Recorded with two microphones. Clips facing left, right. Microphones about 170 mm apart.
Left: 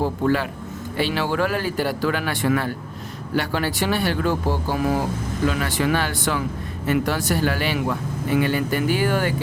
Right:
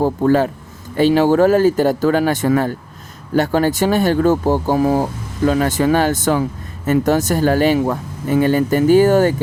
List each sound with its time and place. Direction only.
0.0 s speech: 45° right (ahead or behind)